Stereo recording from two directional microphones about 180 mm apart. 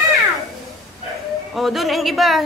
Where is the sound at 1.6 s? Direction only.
Centre (ahead or behind).